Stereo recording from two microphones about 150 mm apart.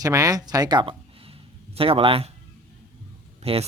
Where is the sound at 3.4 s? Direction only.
40° right (ahead or behind).